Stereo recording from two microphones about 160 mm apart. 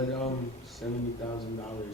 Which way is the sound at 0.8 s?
5° left (ahead or behind).